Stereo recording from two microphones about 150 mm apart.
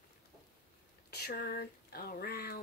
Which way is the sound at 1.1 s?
90° left.